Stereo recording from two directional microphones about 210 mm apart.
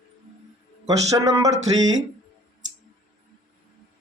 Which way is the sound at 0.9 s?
15° right (ahead or behind).